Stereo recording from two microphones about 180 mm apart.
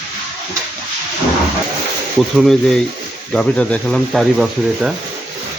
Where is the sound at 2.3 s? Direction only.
Centre (ahead or behind).